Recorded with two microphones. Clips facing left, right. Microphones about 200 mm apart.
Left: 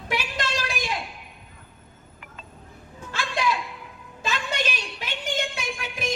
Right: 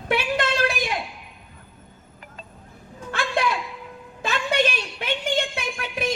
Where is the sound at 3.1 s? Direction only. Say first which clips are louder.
Right 2 dB; 55° right (ahead or behind).